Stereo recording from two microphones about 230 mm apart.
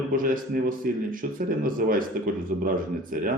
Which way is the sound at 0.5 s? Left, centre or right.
Right.